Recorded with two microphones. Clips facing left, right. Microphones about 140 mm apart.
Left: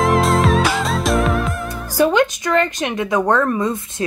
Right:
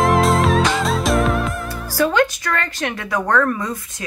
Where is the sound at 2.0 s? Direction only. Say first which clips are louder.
Left 2 dB; 20° left (ahead or behind).